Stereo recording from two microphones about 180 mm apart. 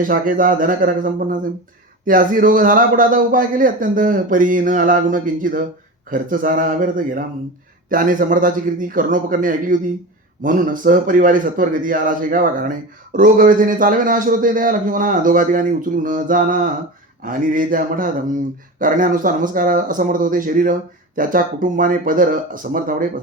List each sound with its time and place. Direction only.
0.1 s a man's voice: 50° right (ahead or behind)